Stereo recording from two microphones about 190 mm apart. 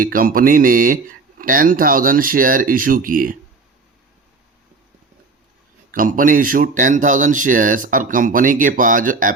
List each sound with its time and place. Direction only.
0.0 s speech: 50° right (ahead or behind)
5.9 s speech: 45° right (ahead or behind)